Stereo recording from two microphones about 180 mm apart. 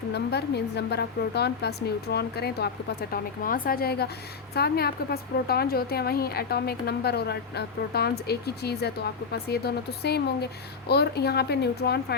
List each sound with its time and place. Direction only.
0.1 s a woman's voice: 65° left (ahead or behind)
3.1 s a woman's voice: 50° left (ahead or behind)